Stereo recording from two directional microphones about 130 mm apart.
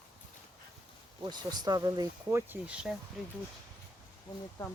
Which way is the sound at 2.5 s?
10° right (ahead or behind).